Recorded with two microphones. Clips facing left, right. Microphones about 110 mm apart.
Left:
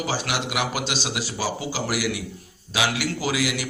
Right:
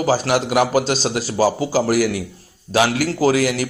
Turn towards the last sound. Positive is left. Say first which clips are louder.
# right 9 dB
turn(degrees=-45)  # may be behind; listen again after turning